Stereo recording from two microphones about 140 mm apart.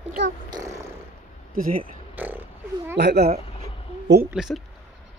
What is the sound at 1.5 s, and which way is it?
Speech, 80° right.